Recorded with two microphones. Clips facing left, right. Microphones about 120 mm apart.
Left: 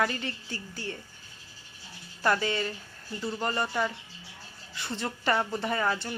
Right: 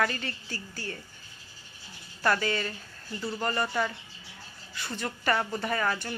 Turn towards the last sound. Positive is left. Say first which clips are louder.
# left 1 dB
turn(degrees=20)  # may be behind; listen again after turning